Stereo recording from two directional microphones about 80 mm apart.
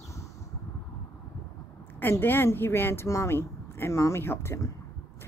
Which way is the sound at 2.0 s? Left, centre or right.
Left.